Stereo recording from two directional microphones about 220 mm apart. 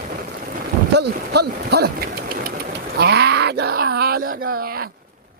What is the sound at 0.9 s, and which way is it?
Engine, 50° right (ahead or behind).